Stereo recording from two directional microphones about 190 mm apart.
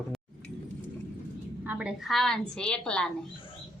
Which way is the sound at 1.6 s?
5° right (ahead or behind).